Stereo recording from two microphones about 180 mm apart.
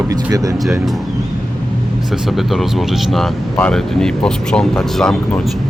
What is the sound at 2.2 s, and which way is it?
Speech, centre (ahead or behind).